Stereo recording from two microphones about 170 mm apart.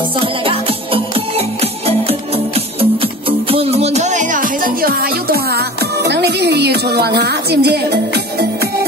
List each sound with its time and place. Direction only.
0.2 s music: 30° right (ahead or behind); by 8.6 s 75° right (ahead or behind)